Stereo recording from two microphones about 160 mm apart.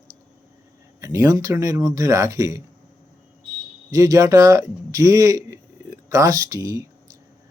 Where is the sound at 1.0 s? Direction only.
20° right (ahead or behind).